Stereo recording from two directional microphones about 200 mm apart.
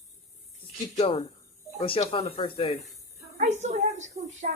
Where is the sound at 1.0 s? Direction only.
30° left (ahead or behind).